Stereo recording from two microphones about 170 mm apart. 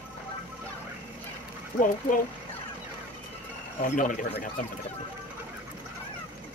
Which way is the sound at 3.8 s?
50° left (ahead or behind).